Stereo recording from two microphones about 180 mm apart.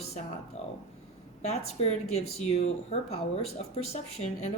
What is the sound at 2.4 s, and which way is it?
Speech, 35° left (ahead or behind).